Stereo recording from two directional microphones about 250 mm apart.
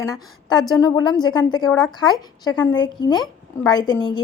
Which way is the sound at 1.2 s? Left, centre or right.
Centre.